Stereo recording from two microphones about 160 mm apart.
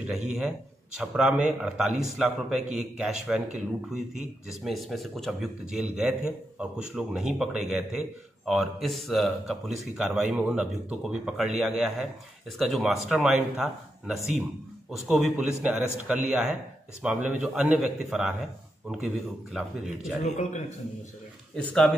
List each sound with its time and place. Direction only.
0.0 s a man's voice: 5° right (ahead or behind)
20.2 s a man's voice: 45° left (ahead or behind)